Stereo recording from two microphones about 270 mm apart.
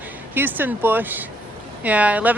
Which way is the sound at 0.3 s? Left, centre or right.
Centre.